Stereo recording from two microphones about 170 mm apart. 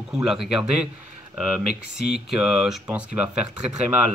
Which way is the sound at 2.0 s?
Centre (ahead or behind).